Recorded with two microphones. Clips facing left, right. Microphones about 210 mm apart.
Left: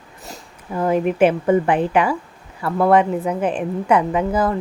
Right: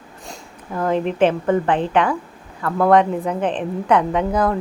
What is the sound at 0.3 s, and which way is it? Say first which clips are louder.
A woman's voice: left 1 dB; 10° left (ahead or behind).